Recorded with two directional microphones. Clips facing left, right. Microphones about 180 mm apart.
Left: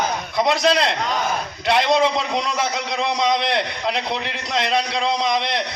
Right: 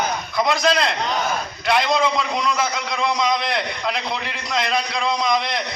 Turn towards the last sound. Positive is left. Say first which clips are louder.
# even
turn(degrees=30)  # may be behind; listen again after turning